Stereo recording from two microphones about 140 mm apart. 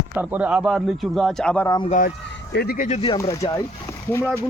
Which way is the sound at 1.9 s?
85° left.